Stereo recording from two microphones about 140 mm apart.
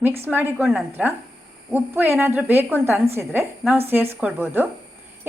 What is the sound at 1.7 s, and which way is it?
A woman's voice, 15° right (ahead or behind).